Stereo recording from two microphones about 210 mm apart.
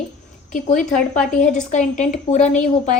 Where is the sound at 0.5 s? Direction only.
35° left (ahead or behind).